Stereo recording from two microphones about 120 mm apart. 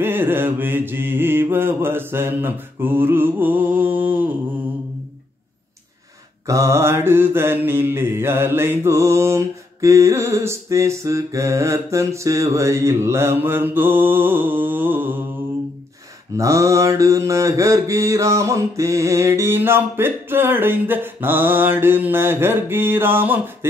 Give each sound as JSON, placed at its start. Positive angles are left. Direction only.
{"t": 0.0, "sound": "mantra", "side_deg": -15}
{"t": 6.4, "sound": "mantra", "side_deg": -25}
{"t": 16.3, "sound": "mantra", "side_deg": -25}